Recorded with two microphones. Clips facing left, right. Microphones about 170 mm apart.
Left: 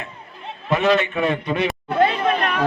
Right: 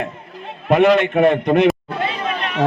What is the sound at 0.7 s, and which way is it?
A man's voice, 60° right (ahead or behind).